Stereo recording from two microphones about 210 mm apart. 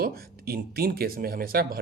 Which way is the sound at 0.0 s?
45° right (ahead or behind).